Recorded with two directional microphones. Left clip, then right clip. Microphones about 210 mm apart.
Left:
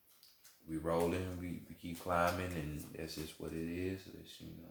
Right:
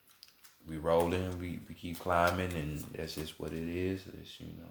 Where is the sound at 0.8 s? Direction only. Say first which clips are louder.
Right 6 dB; 40° right (ahead or behind).